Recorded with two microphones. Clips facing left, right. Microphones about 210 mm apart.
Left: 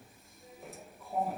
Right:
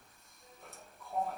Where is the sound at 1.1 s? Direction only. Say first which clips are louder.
Left 2 dB; 5° left (ahead or behind).